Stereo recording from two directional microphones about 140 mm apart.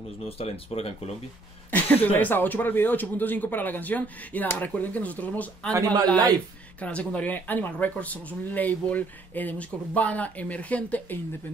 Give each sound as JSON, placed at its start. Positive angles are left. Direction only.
{"t": 0.2, "sound": "speech", "side_deg": 45}
{"t": 1.7, "sound": "speech", "side_deg": 10}